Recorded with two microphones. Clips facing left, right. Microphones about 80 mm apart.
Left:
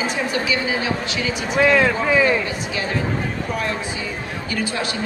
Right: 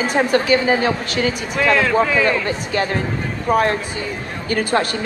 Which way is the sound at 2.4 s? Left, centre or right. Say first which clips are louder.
Right 5 dB; right.